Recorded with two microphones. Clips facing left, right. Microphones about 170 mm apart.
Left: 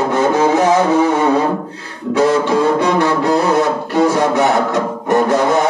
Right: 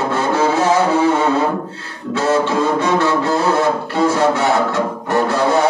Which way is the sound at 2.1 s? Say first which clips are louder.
Left 3 dB; 15° left (ahead or behind).